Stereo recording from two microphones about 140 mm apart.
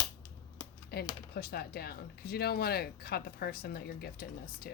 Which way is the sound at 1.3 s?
90° left.